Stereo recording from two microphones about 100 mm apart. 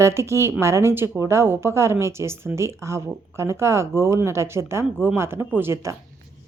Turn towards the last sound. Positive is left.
turn(degrees=-30)  # may be behind; listen again after turning